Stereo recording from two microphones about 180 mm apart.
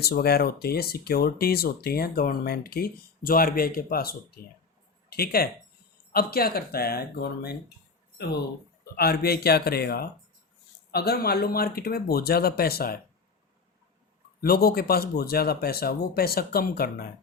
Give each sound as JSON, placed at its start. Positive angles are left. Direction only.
{"t": 0.0, "sound": "speech", "side_deg": 60}
{"t": 8.8, "sound": "speech", "side_deg": 60}
{"t": 14.4, "sound": "speech", "side_deg": 55}